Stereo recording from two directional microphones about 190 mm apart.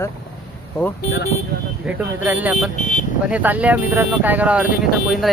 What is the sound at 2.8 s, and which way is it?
Speech, 40° left (ahead or behind).